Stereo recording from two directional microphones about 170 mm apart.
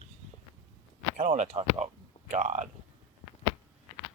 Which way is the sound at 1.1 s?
45° right (ahead or behind).